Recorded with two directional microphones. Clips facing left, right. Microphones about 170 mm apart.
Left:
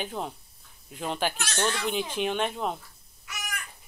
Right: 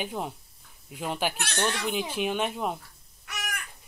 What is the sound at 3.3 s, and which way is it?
Crow, 65° right (ahead or behind).